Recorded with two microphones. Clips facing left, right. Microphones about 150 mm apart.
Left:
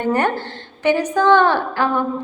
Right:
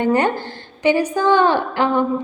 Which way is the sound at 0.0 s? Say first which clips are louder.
Right 2 dB; 15° right (ahead or behind).